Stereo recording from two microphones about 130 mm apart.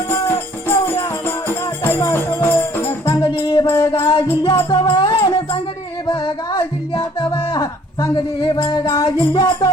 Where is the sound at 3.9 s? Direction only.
40° left (ahead or behind).